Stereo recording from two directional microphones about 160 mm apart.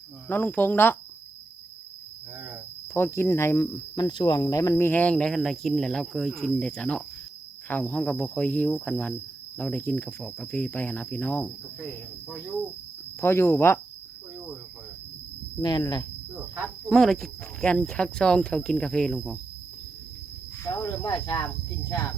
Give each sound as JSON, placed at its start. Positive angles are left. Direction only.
{"t": 0.3, "sound": "speech", "side_deg": 10}
{"t": 2.9, "sound": "speech", "side_deg": 15}
{"t": 4.9, "sound": "speech", "side_deg": 10}
{"t": 13.1, "sound": "speech", "side_deg": 15}
{"t": 15.6, "sound": "speech", "side_deg": 25}
{"t": 16.6, "sound": "speech", "side_deg": 5}
{"t": 20.7, "sound": "speech", "side_deg": 25}